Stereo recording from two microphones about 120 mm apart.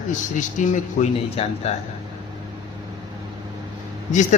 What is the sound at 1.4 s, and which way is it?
Speech, 55° left (ahead or behind).